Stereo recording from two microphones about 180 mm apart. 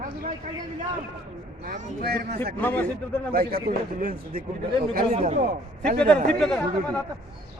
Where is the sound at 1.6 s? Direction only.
55° right (ahead or behind).